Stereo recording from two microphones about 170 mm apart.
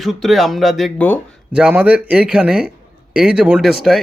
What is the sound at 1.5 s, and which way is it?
Speech, 5° right (ahead or behind).